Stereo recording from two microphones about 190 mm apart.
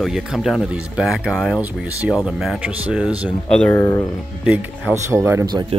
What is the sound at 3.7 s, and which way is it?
Speech, 15° left (ahead or behind).